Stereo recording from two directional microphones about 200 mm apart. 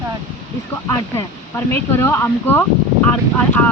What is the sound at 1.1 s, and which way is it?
Speech, 10° left (ahead or behind).